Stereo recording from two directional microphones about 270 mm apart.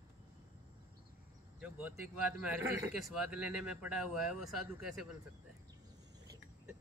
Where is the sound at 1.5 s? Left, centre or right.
Centre.